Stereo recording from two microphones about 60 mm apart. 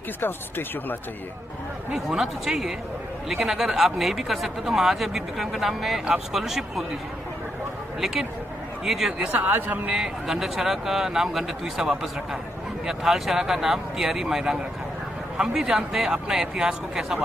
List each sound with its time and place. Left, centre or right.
0.2 s speech: left
2.0 s speech: centre
8.0 s speech: centre
9.2 s speech: right
9.9 s speech: centre